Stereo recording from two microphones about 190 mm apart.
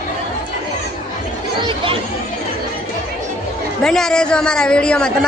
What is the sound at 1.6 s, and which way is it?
Chatter, 25° right (ahead or behind).